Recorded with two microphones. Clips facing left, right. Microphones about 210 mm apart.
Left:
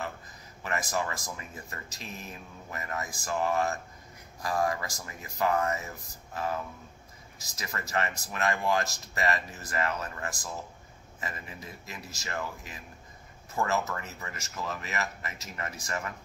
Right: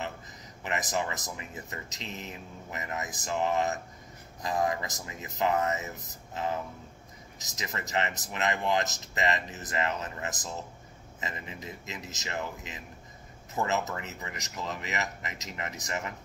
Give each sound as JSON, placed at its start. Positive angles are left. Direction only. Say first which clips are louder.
{"t": 0.7, "sound": "speech", "louder": "even", "side_deg": -20}